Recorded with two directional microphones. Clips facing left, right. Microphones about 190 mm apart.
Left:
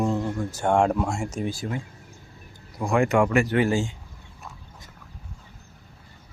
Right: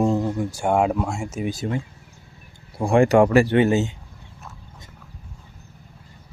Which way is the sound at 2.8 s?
30° right (ahead or behind).